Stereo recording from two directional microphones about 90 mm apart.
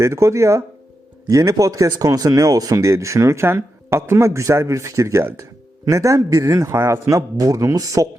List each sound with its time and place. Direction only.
0.0 s speech: 35° right (ahead or behind)